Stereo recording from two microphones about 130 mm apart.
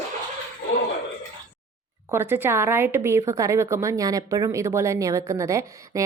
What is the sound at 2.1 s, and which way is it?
A woman's voice, 15° right (ahead or behind).